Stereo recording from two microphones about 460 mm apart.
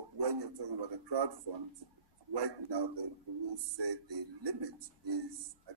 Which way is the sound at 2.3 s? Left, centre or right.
Right.